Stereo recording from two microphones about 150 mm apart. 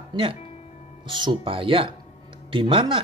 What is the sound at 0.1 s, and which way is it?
Speech, 35° right (ahead or behind).